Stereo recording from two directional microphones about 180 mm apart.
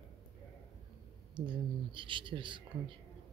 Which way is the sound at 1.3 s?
25° right (ahead or behind).